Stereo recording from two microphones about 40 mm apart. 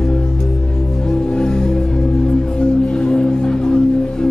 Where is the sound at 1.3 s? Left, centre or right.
Centre.